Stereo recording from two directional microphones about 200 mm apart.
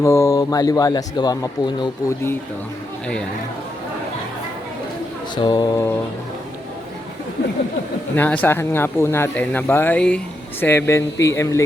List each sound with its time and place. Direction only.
0.0 s speech: 15° left (ahead or behind)
5.3 s music: 20° left (ahead or behind)
8.1 s speech: 10° left (ahead or behind)